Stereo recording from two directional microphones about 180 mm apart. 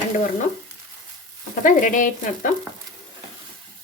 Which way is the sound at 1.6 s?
45° left (ahead or behind).